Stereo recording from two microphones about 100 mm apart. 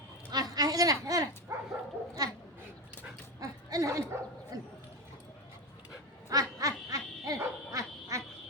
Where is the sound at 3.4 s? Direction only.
35° right (ahead or behind).